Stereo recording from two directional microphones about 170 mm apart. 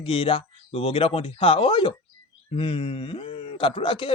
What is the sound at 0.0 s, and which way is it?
Speech, 30° left (ahead or behind).